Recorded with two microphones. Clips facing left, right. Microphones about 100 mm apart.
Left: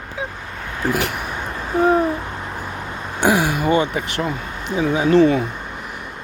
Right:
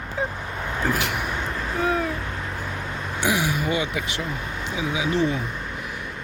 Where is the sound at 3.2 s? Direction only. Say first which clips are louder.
Left 7 dB; 45° left (ahead or behind).